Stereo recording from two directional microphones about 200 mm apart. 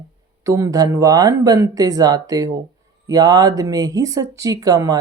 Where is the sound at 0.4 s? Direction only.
15° right (ahead or behind).